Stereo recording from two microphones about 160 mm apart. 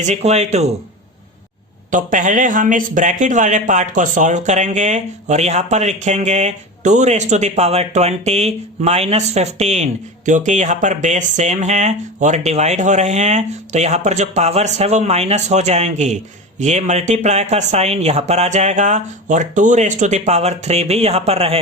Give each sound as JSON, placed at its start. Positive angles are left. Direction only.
{"t": 0.0, "sound": "a man's voice", "side_deg": -45}
{"t": 1.9, "sound": "a man's voice", "side_deg": -55}